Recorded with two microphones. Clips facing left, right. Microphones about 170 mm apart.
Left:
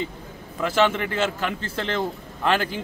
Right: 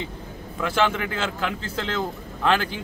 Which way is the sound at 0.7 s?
Centre (ahead or behind).